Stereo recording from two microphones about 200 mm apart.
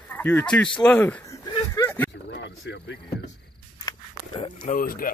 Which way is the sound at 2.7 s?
60° left (ahead or behind).